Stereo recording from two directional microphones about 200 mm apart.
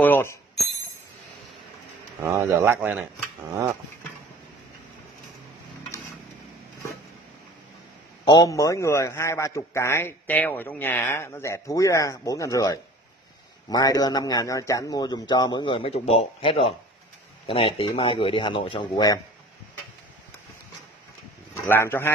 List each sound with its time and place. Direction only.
0.0 s speech: 10° left (ahead or behind)
2.1 s speech: 15° right (ahead or behind)
8.3 s a man's voice: 15° left (ahead or behind)
21.6 s a man's voice: 10° left (ahead or behind)